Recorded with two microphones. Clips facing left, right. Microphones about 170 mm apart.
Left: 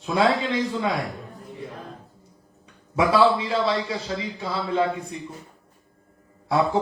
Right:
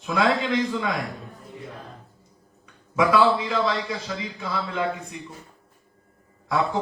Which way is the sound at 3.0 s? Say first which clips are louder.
Left 1 dB; 30° left (ahead or behind).